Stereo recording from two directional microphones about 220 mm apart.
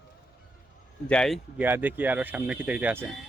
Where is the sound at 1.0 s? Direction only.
5° left (ahead or behind).